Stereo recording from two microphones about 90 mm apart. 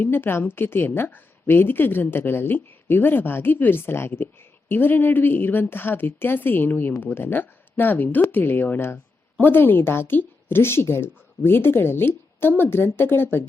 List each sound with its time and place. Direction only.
0.0 s a woman's voice: 25° left (ahead or behind)